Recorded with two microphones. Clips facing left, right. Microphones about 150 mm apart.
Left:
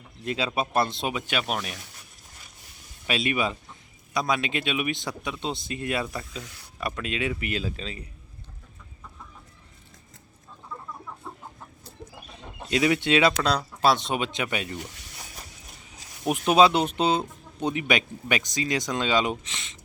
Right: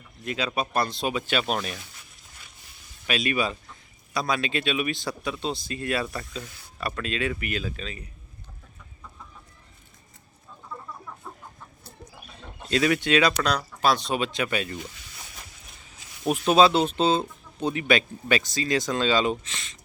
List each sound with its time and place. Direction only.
0.2 s speech: 30° left (ahead or behind); by 1.5 s 10° left (ahead or behind)
3.1 s speech: 25° left (ahead or behind)
12.7 s speech: 20° left (ahead or behind)
16.2 s speech: 15° left (ahead or behind)